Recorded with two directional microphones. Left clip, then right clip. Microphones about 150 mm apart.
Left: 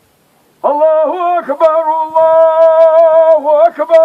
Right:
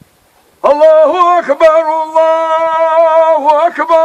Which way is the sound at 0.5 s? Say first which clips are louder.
Right 4 dB; 20° right (ahead or behind).